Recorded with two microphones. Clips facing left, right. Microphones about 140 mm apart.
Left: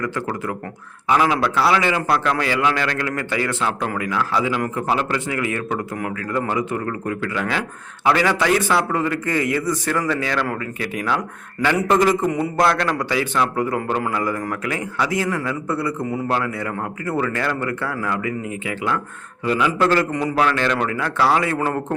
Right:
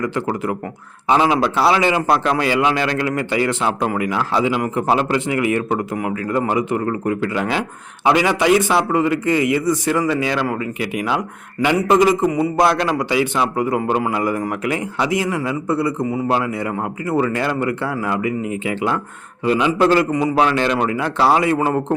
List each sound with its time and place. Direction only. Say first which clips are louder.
0.0 s a man's voice: right 4 dB; 20° right (ahead or behind)
19.5 s a man's voice: right 3 dB; 20° right (ahead or behind)
20.3 s a man's voice: right 1 dB; 20° right (ahead or behind)